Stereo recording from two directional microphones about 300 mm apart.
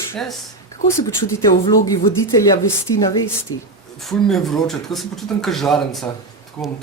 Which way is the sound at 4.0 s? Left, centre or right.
Centre.